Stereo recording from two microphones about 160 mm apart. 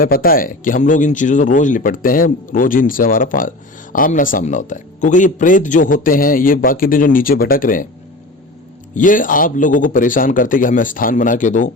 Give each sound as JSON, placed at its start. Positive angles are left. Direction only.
{"t": 0.0, "sound": "speech", "side_deg": 65}
{"t": 9.0, "sound": "speech", "side_deg": 55}